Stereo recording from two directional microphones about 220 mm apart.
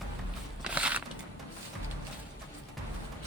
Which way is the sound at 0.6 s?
5° right (ahead or behind).